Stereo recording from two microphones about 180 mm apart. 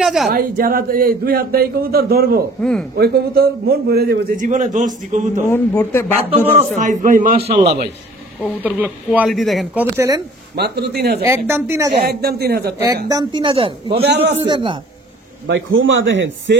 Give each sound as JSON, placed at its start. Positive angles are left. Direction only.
{"t": 0.0, "sound": "a woman's voice", "side_deg": 0}
{"t": 0.3, "sound": "a man's voice", "side_deg": -55}
{"t": 2.6, "sound": "a man's voice", "side_deg": 5}
{"t": 3.0, "sound": "a man's voice", "side_deg": -60}
{"t": 5.5, "sound": "a man's voice", "side_deg": 15}
{"t": 6.7, "sound": "a man's voice", "side_deg": -45}
{"t": 7.3, "sound": "a man's voice", "side_deg": -30}
{"t": 8.6, "sound": "speech", "side_deg": -10}
{"t": 10.5, "sound": "a man's voice", "side_deg": -65}
{"t": 11.2, "sound": "speech", "side_deg": -15}
{"t": 12.0, "sound": "a man's voice", "side_deg": -60}
{"t": 12.7, "sound": "a man's voice", "side_deg": -20}
{"t": 15.4, "sound": "a man's voice", "side_deg": -90}